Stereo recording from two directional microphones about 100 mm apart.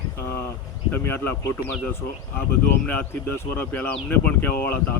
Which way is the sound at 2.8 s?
15° left (ahead or behind).